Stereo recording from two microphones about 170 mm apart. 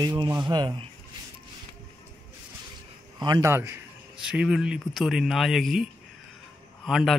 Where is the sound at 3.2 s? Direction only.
20° right (ahead or behind).